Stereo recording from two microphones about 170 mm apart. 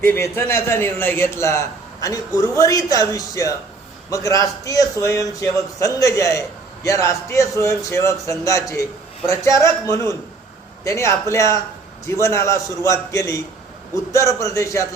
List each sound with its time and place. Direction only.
0.0 s a man's voice: 15° left (ahead or behind)